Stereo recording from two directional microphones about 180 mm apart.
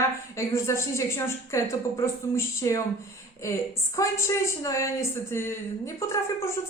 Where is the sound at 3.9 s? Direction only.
15° left (ahead or behind).